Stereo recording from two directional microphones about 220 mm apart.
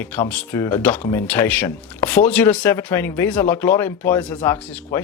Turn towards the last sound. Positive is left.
turn(degrees=10)  # may be behind; listen again after turning